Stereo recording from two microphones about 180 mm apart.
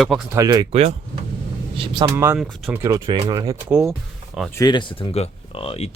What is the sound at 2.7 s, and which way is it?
Speech, 20° right (ahead or behind).